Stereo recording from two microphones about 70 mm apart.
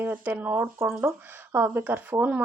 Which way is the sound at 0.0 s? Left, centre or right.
Right.